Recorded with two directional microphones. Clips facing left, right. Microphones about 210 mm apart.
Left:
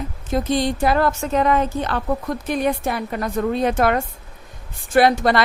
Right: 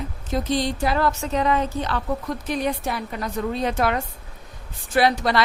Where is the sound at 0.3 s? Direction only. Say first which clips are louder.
Left 3 dB; 50° left (ahead or behind).